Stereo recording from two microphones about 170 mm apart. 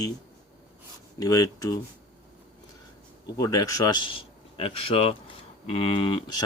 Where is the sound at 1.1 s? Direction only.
20° left (ahead or behind).